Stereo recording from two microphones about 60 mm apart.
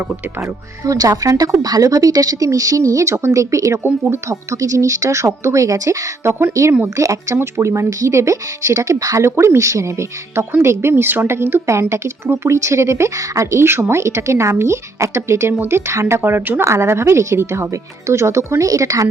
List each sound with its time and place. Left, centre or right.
0.9 s a woman's voice: right
7.3 s speech: right
7.9 s speech: right
9.2 s a woman's voice: right
13.7 s speech: right